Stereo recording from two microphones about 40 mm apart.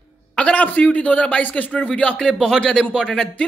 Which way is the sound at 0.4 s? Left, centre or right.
Left.